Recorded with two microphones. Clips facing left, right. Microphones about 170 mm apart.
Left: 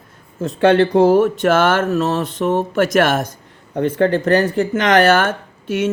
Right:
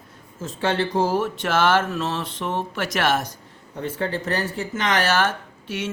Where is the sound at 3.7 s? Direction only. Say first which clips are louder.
Left 11 dB; 65° left (ahead or behind).